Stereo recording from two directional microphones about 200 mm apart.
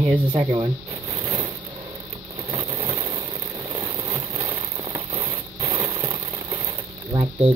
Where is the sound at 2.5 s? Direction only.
25° right (ahead or behind).